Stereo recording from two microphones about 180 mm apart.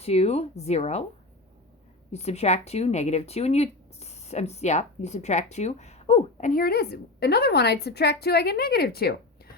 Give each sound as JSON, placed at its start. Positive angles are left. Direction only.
{"t": 0.0, "sound": "speech", "side_deg": 35}
{"t": 2.1, "sound": "speech", "side_deg": 35}